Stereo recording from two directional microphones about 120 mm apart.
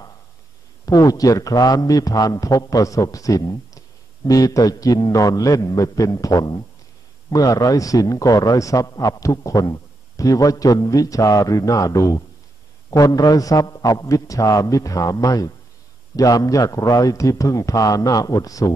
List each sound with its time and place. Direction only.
0.8 s speech: 30° left (ahead or behind)